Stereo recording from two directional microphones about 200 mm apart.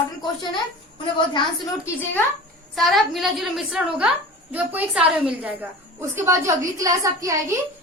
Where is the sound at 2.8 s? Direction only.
Centre (ahead or behind); by 7.5 s 15° right (ahead or behind).